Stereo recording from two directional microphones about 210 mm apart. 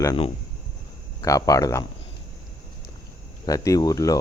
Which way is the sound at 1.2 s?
15° left (ahead or behind).